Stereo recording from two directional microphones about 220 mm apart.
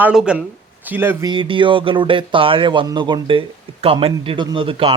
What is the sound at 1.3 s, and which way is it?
Speech, 20° right (ahead or behind).